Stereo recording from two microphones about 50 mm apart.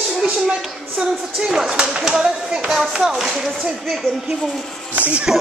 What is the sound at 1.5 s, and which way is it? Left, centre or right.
Speech, centre.